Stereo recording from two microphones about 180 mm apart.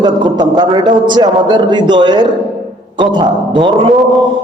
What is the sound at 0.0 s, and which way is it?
A man's voice, 25° right (ahead or behind).